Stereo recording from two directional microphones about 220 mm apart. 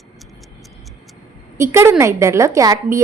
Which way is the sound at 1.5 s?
10° right (ahead or behind).